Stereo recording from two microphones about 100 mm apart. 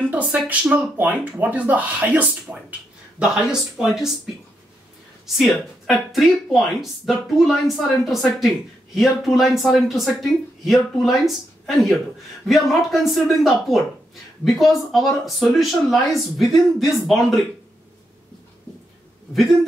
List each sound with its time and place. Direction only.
0.1 s speech: 15° right (ahead or behind)
5.2 s speech: centre (ahead or behind)